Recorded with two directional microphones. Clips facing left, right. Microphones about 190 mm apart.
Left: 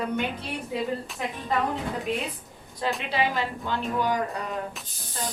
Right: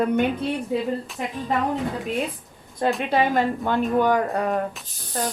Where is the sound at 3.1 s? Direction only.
50° right (ahead or behind).